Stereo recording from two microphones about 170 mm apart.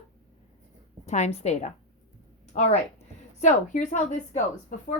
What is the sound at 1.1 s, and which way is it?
A woman's voice, 40° left (ahead or behind).